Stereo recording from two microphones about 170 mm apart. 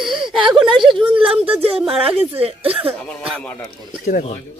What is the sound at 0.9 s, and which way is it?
Speech, 30° right (ahead or behind).